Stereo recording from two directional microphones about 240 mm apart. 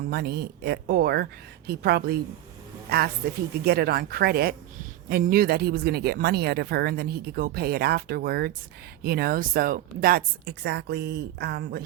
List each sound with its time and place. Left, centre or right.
0.1 s speech: right